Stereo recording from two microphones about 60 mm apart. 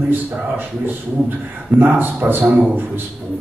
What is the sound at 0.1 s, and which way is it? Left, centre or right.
Speech, right.